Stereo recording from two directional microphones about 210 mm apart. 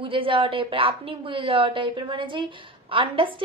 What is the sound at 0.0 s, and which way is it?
A woman's voice, 25° right (ahead or behind).